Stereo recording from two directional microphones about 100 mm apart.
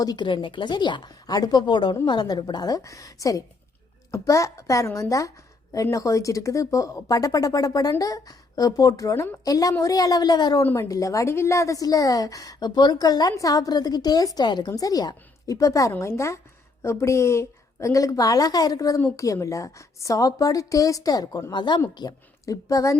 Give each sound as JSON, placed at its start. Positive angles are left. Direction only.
{"t": 0.0, "sound": "a woman's voice", "side_deg": 45}
{"t": 9.5, "sound": "a woman's voice", "side_deg": 35}
{"t": 10.8, "sound": "a woman's voice", "side_deg": 35}